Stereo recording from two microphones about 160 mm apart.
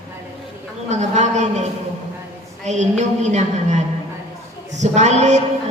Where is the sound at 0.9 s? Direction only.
45° right (ahead or behind).